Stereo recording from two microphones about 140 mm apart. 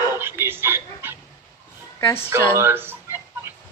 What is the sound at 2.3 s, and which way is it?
Speech, 15° right (ahead or behind).